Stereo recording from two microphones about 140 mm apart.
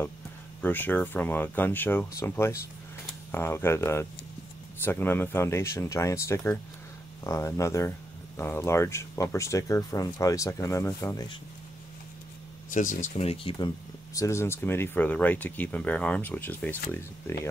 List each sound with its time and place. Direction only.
0.6 s speech: 15° left (ahead or behind)
12.7 s speech: 65° left (ahead or behind); by 13.7 s 40° left (ahead or behind)
14.1 s speech: 20° left (ahead or behind)